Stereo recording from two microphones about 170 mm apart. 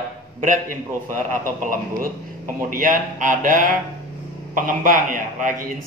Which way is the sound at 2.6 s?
50° right (ahead or behind).